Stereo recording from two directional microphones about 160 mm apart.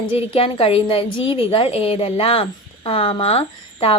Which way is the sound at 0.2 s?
35° left (ahead or behind).